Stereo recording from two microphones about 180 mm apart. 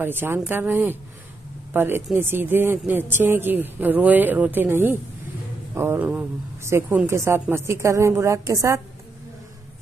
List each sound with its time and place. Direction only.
0.0 s speech: 10° right (ahead or behind)